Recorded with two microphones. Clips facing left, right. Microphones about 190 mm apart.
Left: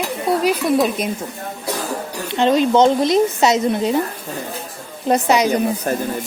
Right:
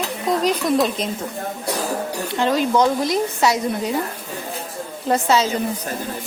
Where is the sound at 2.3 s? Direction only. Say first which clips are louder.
Left 5 dB; 20° left (ahead or behind).